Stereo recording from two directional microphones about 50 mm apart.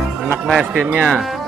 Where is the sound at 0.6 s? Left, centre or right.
Right.